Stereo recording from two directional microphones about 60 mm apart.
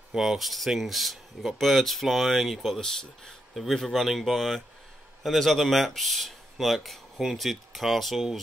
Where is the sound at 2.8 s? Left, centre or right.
Centre.